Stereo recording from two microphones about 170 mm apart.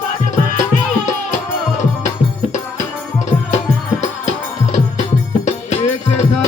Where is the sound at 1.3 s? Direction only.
45° left (ahead or behind).